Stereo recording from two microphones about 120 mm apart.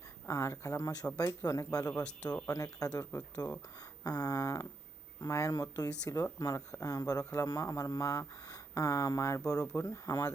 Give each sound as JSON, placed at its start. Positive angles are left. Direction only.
{"t": 0.3, "sound": "speech", "side_deg": 25}
{"t": 4.0, "sound": "a sound", "side_deg": 30}
{"t": 5.2, "sound": "speech", "side_deg": 25}